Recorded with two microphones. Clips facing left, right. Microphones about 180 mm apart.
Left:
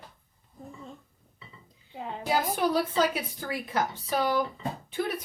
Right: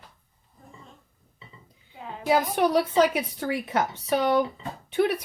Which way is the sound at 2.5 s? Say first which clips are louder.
Right 4 dB; 70° right (ahead or behind).